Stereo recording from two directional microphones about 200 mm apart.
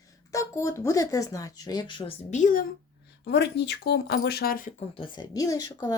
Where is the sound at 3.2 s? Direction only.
55° left (ahead or behind).